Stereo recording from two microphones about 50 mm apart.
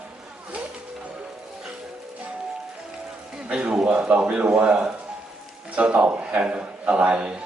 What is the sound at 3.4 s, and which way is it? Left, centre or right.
A man's voice, centre.